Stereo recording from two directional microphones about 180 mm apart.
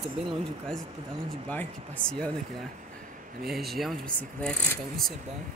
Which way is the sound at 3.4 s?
Centre (ahead or behind).